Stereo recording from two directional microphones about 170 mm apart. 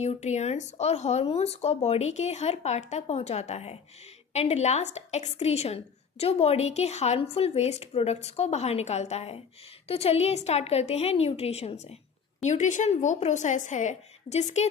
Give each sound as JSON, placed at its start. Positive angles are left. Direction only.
{"t": 0.0, "sound": "a woman's voice", "side_deg": 40}